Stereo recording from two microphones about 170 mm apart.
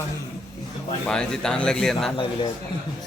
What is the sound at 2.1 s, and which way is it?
Speech, 30° left (ahead or behind).